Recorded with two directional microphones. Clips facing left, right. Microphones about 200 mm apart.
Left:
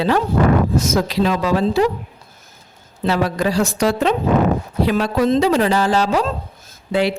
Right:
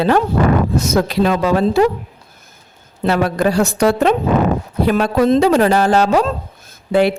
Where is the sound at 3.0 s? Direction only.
55° right (ahead or behind).